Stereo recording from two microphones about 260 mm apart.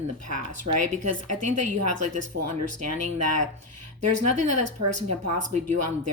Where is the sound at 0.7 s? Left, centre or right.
Right.